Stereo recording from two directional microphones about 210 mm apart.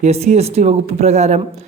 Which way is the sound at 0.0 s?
30° right (ahead or behind).